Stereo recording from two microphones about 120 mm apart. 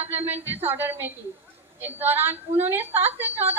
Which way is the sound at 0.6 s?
15° right (ahead or behind).